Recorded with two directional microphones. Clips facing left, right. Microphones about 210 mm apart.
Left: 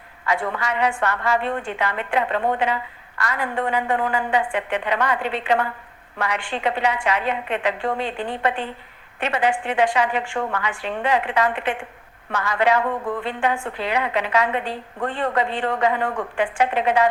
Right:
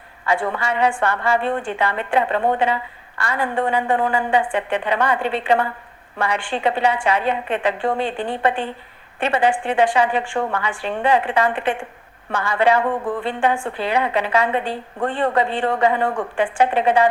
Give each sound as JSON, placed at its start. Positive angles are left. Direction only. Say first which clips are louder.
{"t": 0.3, "sound": "a woman's voice", "louder": "right 3 dB", "side_deg": -30}